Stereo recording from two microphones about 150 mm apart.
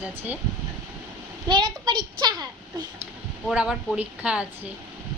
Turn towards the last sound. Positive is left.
turn(degrees=-10)  # may be behind; listen again after turning